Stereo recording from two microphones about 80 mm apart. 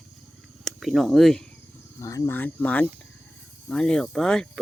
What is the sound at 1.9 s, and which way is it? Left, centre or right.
Speech, left.